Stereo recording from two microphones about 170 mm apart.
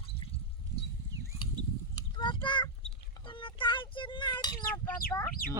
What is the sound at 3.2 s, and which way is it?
A child's voice, 30° left (ahead or behind).